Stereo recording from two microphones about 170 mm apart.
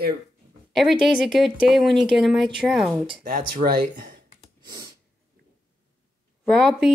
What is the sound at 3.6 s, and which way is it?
Speech, 55° right (ahead or behind).